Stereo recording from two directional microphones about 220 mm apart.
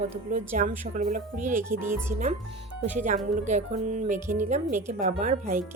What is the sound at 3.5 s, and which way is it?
Speech, 35° right (ahead or behind).